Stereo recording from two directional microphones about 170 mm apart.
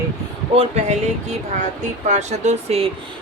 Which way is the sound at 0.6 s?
40° right (ahead or behind).